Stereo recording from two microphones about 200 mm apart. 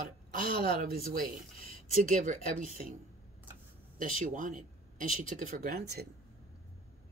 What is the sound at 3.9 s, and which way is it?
Speech, 40° right (ahead or behind).